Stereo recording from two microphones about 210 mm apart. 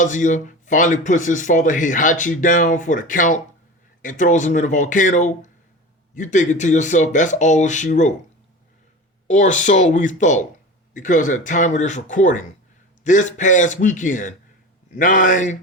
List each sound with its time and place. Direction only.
0.0 s a man's voice: 35° left (ahead or behind)
9.2 s a man's voice: 35° left (ahead or behind)